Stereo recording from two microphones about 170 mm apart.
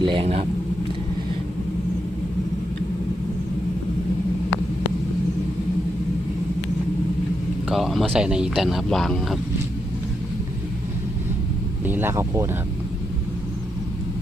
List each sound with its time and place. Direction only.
0.0 s speech: 30° right (ahead or behind)
7.7 s speech: centre (ahead or behind)
11.9 s speech: 15° right (ahead or behind)